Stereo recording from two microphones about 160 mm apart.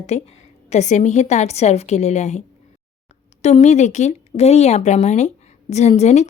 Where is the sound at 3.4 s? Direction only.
45° left (ahead or behind).